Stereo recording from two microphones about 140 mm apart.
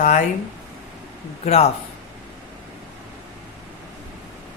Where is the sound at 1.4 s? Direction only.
50° left (ahead or behind).